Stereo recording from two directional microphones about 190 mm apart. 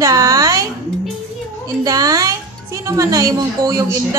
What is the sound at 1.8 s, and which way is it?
Speech, 20° right (ahead or behind).